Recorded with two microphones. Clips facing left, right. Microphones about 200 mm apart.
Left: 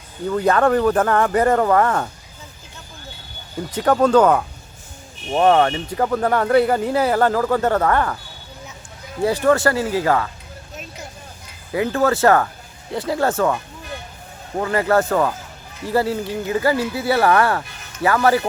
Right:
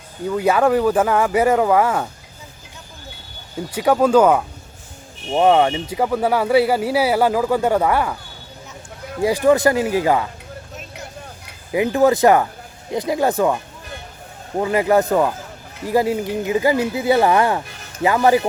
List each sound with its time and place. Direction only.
0.3 s speech: 10° right (ahead or behind)
3.7 s speech: 10° right (ahead or behind)
9.2 s speech: 15° right (ahead or behind)
11.7 s speech: 15° right (ahead or behind)
14.6 s speech: 15° right (ahead or behind)